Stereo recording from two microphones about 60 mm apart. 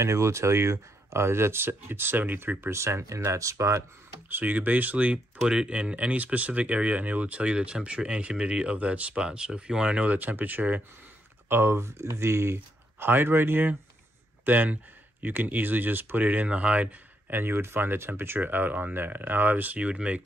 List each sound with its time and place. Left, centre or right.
0.0 s speech: right
2.6 s speech: right
4.3 s speech: right
10.1 s speech: right
11.4 s speech: right
12.5 s speech: right; by 16.9 s centre
17.3 s speech: right; by 20.2 s centre